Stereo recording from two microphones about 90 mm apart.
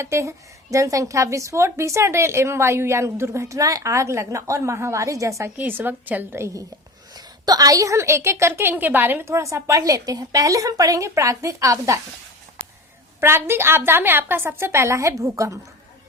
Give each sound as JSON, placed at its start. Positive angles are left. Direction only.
{"t": 0.0, "sound": "a woman's voice", "side_deg": -30}
{"t": 5.5, "sound": "a woman's voice", "side_deg": -20}
{"t": 6.4, "sound": "a woman's voice", "side_deg": -35}
{"t": 7.1, "sound": "a woman's voice", "side_deg": -50}
{"t": 13.1, "sound": "a woman's voice", "side_deg": -25}